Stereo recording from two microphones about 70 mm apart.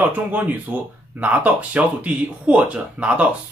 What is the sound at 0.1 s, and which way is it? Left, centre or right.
Speech, right.